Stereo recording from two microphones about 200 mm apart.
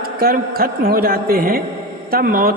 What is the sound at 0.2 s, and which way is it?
A man's voice, 50° right (ahead or behind).